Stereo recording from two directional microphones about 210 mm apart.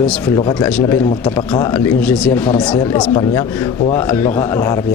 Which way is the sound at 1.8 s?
5° left (ahead or behind).